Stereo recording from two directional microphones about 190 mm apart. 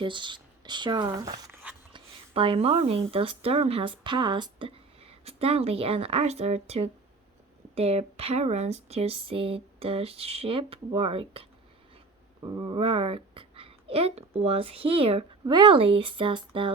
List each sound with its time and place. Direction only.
0.0 s speech: 25° right (ahead or behind)
12.4 s a child's voice: 20° right (ahead or behind)